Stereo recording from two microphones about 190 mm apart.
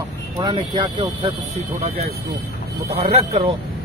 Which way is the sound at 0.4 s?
25° right (ahead or behind).